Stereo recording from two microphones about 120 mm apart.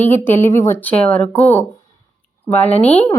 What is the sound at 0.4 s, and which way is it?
Speech, 20° left (ahead or behind).